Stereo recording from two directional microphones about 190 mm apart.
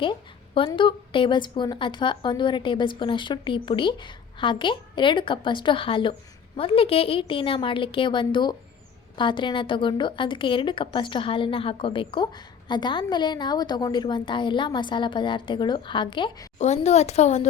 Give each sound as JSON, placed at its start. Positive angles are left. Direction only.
{"t": 0.0, "sound": "a woman's voice", "side_deg": 25}
{"t": 16.6, "sound": "speech", "side_deg": 35}